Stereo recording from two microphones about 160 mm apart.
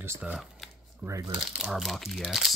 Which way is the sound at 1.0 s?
20° right (ahead or behind).